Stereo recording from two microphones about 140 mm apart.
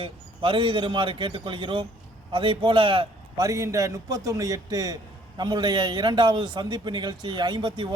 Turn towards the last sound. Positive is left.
turn(degrees=-35)  # may be behind; listen again after turning